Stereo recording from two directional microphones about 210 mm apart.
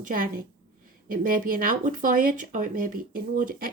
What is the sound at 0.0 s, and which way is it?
Speech, 40° right (ahead or behind).